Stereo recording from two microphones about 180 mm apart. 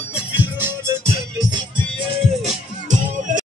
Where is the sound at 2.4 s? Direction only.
40° right (ahead or behind).